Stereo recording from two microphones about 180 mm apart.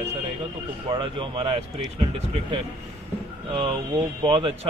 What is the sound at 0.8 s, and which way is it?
A man's voice, 30° right (ahead or behind).